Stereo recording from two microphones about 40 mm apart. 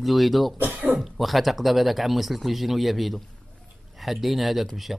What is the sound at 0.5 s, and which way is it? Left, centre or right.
Speech, right.